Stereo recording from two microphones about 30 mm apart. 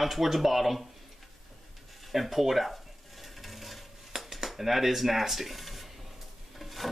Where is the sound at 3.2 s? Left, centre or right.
Centre.